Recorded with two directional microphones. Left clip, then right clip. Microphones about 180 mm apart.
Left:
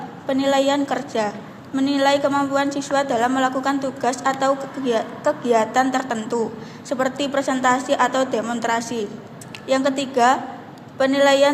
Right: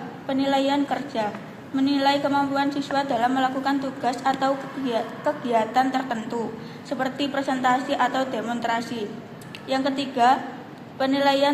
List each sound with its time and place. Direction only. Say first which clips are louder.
0.3 s a woman's voice: left 4 dB; 40° left (ahead or behind)